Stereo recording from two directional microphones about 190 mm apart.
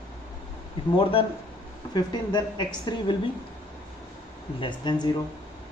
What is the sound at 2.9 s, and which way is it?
Music, 20° left (ahead or behind).